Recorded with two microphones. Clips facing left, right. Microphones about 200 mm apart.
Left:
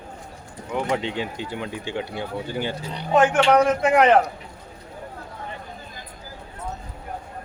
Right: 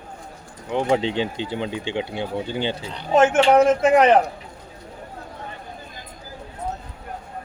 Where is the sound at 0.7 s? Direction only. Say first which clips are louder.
Right 4 dB; 30° right (ahead or behind).